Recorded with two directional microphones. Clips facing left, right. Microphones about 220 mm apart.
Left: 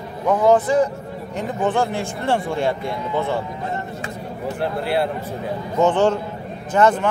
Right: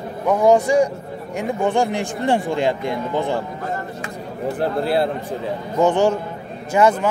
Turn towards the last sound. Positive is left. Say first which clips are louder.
# right 1 dB
turn(degrees=-10)  # may be behind; listen again after turning